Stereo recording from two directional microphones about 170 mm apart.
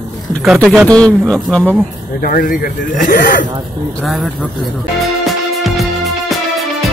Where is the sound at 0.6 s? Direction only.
5° left (ahead or behind).